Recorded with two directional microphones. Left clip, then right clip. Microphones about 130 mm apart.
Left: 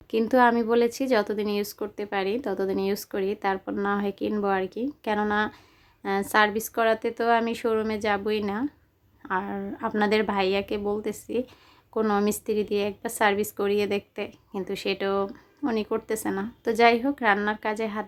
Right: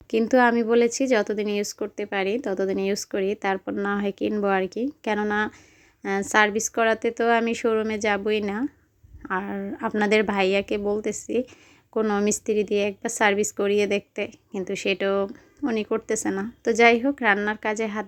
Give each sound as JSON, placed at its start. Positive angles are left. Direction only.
{"t": 0.1, "sound": "a woman's voice", "side_deg": -25}